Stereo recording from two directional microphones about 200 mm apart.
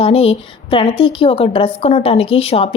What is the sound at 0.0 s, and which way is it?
A woman's voice, 30° left (ahead or behind).